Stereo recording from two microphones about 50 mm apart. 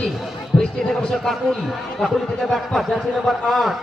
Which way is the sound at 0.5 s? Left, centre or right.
Centre.